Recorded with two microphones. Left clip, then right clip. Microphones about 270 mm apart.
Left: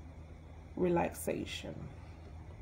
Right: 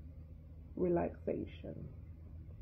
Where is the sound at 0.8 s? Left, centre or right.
Left.